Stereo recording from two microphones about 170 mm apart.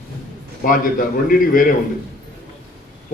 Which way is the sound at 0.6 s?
55° left (ahead or behind).